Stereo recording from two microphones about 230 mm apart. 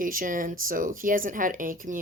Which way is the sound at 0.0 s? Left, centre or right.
Right.